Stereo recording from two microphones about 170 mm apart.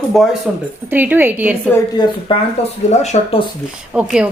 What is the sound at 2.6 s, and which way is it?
Speech, 35° left (ahead or behind).